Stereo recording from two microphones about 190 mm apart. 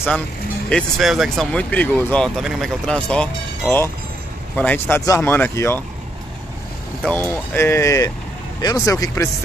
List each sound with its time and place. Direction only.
0.7 s speech: 5° left (ahead or behind)
7.1 s speech: 10° left (ahead or behind)